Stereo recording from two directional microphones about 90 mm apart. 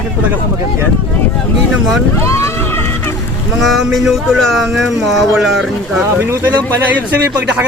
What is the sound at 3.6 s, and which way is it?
Speech, centre (ahead or behind).